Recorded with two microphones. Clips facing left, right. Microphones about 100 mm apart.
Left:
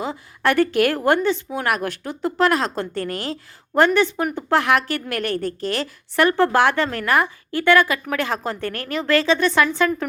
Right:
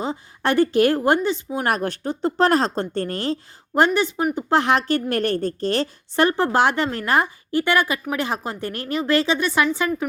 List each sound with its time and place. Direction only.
0.0 s a woman's voice: 20° right (ahead or behind)
1.6 s speech: 30° right (ahead or behind)
3.8 s a woman's voice: 20° right (ahead or behind)